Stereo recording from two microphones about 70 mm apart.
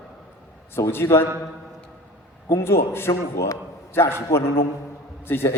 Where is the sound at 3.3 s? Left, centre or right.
Left.